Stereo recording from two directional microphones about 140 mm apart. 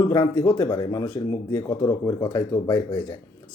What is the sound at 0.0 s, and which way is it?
Speech, 30° left (ahead or behind).